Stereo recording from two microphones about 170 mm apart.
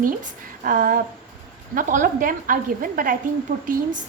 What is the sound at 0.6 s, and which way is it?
A woman's voice, 55° right (ahead or behind).